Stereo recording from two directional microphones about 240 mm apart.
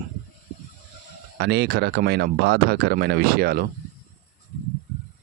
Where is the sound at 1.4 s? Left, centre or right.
Right.